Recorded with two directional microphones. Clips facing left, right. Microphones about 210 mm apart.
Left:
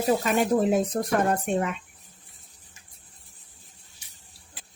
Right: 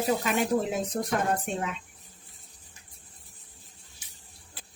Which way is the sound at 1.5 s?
55° left (ahead or behind).